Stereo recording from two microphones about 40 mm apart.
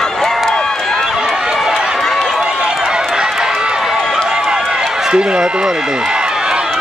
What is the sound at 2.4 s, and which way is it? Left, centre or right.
Run, right.